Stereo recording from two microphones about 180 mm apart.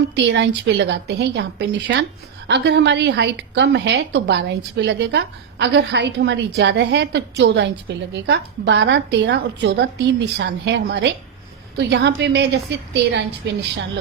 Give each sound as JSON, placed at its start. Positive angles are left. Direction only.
{"t": 0.3, "sound": "a woman's voice", "side_deg": -80}